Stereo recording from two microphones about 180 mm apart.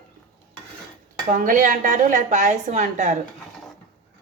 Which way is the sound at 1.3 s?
45° right (ahead or behind).